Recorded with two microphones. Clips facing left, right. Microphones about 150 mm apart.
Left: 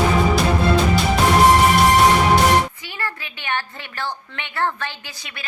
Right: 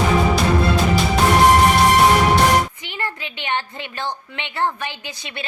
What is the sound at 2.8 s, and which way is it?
A woman's voice, 20° right (ahead or behind).